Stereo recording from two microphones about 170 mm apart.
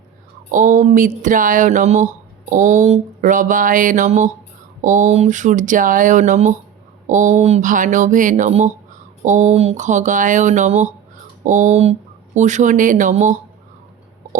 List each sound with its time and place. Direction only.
0.5 s speech: 50° right (ahead or behind)